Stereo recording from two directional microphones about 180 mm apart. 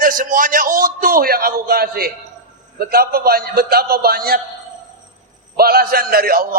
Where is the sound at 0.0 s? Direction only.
50° right (ahead or behind).